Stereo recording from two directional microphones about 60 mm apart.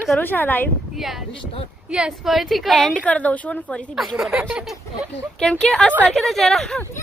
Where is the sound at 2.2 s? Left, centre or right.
Centre.